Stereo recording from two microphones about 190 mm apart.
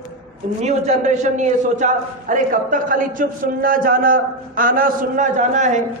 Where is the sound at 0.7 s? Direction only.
35° right (ahead or behind).